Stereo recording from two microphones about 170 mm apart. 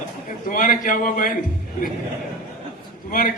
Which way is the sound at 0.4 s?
55° left (ahead or behind).